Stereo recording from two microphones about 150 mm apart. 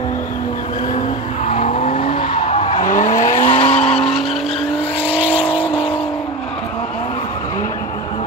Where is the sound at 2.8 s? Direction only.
60° left (ahead or behind).